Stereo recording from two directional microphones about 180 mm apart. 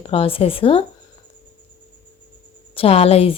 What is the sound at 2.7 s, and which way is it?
Speech, 35° left (ahead or behind).